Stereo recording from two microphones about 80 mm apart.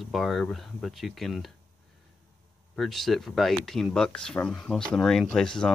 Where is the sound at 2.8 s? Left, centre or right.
Centre.